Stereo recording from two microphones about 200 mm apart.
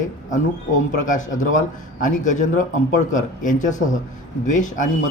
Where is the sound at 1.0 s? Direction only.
40° left (ahead or behind).